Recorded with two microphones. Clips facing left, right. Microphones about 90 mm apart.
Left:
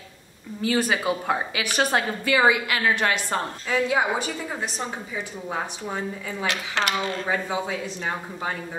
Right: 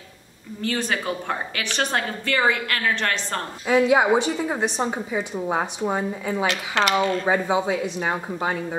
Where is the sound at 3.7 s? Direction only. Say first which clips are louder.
Right 6 dB; 15° right (ahead or behind).